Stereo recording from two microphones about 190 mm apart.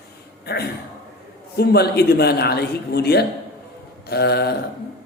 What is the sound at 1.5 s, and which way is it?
A man's voice, 55° left (ahead or behind).